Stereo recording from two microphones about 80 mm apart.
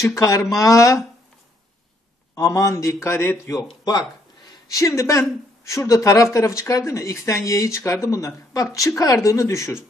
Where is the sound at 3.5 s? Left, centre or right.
Left.